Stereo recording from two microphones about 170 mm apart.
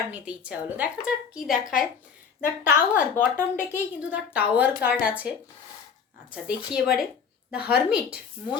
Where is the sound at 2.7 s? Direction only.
10° right (ahead or behind).